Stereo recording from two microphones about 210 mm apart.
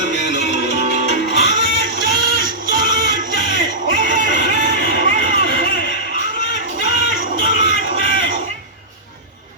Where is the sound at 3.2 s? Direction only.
40° right (ahead or behind).